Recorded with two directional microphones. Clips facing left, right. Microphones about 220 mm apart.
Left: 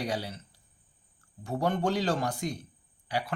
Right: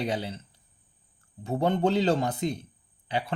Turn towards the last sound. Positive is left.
turn(degrees=-25)  # may be behind; listen again after turning